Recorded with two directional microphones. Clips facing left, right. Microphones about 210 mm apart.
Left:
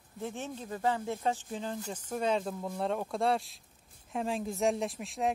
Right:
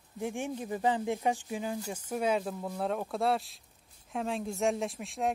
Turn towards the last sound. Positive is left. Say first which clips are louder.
# even
turn(degrees=0)  # may be behind; listen again after turning